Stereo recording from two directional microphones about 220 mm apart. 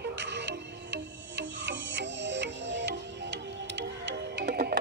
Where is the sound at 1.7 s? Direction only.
55° right (ahead or behind).